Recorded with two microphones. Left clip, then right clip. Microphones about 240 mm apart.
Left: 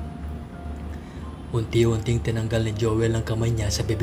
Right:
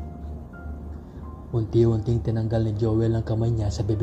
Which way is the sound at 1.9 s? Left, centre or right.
Centre.